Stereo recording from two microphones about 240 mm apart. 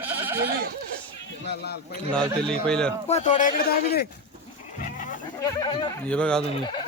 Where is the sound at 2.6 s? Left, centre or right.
Centre.